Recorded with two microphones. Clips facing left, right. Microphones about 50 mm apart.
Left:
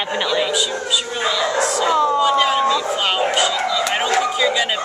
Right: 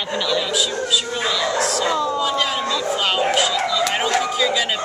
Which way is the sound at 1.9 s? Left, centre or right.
Left.